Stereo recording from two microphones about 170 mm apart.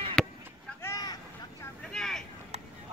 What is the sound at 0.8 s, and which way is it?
Vehicle, 20° left (ahead or behind).